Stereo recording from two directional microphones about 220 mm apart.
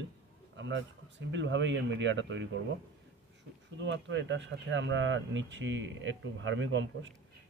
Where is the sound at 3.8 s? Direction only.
55° right (ahead or behind).